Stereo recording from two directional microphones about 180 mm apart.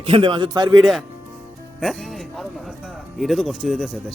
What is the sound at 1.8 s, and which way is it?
Music, centre (ahead or behind).